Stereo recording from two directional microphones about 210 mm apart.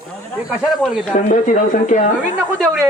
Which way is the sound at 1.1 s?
35° left (ahead or behind).